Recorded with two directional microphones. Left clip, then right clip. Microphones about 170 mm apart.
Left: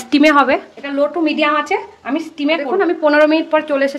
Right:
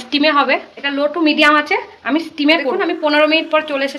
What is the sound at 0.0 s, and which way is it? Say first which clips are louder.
Speech: left 3 dB; 50° left (ahead or behind).